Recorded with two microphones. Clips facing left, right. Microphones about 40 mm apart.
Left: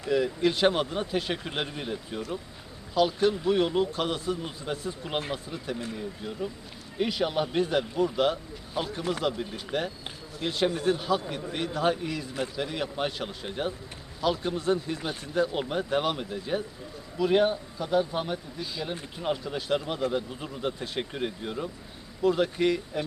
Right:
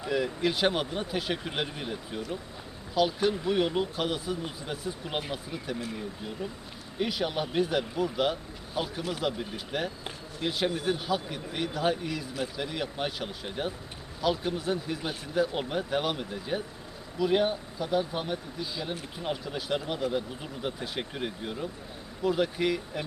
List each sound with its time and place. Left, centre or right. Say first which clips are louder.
0.1 s speech: left 3 dB; centre